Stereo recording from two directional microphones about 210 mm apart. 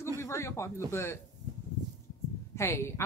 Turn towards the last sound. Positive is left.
turn(degrees=15)  # may be behind; listen again after turning